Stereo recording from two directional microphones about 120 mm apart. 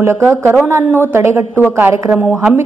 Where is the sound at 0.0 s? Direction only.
10° right (ahead or behind).